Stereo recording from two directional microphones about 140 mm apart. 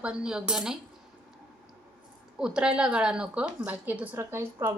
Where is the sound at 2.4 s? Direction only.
5° right (ahead or behind).